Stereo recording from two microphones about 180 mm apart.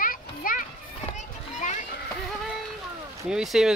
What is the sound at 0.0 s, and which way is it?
Children playing, 50° left (ahead or behind).